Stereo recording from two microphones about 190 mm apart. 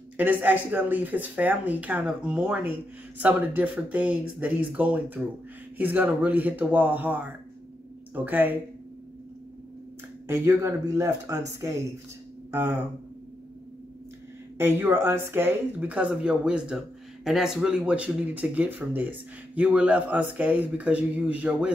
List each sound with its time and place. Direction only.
0.2 s speech: 10° right (ahead or behind)
10.2 s speech: 15° right (ahead or behind)
12.4 s a sound: 10° right (ahead or behind)
14.6 s speech: 10° right (ahead or behind)